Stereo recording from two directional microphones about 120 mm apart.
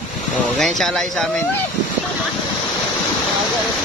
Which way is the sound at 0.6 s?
5° left (ahead or behind).